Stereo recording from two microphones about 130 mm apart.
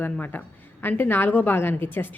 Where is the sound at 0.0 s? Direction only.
15° left (ahead or behind).